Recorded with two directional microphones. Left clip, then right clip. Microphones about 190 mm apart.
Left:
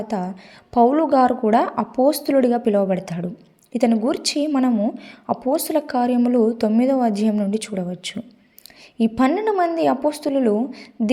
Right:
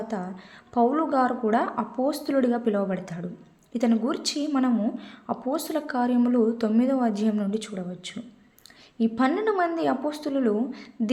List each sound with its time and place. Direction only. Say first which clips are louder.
0.1 s a woman's voice: left 7 dB; 30° left (ahead or behind)